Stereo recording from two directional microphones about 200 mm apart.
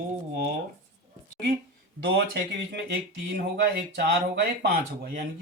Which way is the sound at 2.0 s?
60° right (ahead or behind).